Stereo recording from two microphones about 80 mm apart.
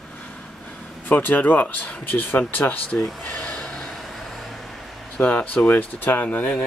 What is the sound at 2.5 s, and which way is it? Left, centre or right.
Speech, left.